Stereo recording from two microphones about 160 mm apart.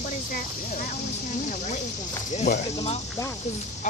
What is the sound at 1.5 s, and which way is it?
Speech, 50° left (ahead or behind).